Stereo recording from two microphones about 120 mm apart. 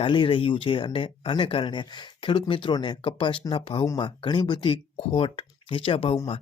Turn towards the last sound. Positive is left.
turn(degrees=50)  # may be behind; listen again after turning